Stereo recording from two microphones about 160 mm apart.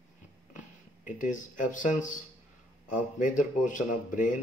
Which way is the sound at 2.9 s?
55° left (ahead or behind).